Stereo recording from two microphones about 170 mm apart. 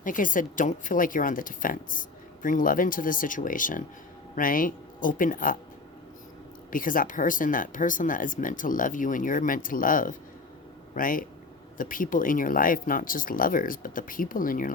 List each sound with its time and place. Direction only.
0.0 s speech: 50° left (ahead or behind)
6.7 s speech: 55° left (ahead or behind)